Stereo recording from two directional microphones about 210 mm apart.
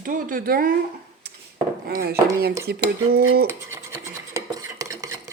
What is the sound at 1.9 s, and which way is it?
Cutlery, 45° right (ahead or behind).